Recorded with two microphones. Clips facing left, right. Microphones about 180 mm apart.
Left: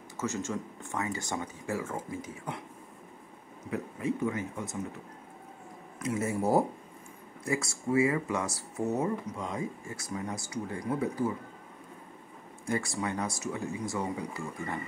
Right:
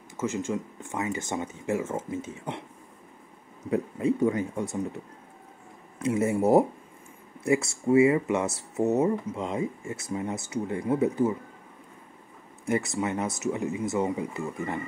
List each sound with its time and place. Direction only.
0.2 s speech: 15° right (ahead or behind)
3.7 s speech: 30° right (ahead or behind)
5.9 s speech: 30° right (ahead or behind)
12.6 s speech: 20° right (ahead or behind)